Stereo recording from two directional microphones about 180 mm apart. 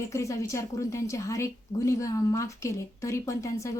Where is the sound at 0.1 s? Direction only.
15° left (ahead or behind).